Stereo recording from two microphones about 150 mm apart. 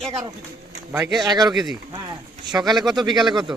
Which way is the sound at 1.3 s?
30° right (ahead or behind).